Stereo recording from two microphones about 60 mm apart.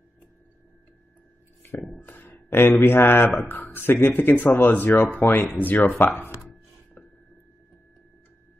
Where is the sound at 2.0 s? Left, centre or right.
Left.